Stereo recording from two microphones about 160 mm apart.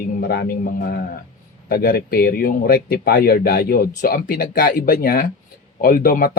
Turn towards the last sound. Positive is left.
turn(degrees=65)  # may be behind; listen again after turning